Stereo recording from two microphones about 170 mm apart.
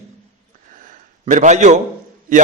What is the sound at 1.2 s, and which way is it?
Speech, 45° right (ahead or behind).